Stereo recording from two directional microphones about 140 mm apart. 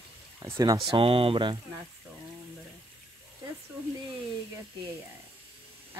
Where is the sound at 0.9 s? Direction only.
40° right (ahead or behind).